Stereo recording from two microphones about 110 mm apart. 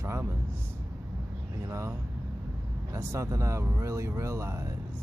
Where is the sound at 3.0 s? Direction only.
25° right (ahead or behind).